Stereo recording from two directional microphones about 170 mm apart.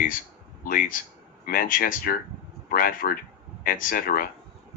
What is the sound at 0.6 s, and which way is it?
Speech, 55° left (ahead or behind).